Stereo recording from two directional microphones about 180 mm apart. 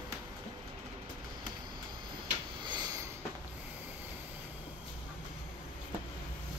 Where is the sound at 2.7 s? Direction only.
20° right (ahead or behind).